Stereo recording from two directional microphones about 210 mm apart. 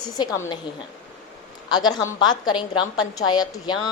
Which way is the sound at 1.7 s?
20° left (ahead or behind).